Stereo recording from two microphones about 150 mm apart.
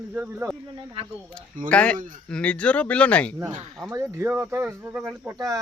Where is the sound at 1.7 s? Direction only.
10° left (ahead or behind).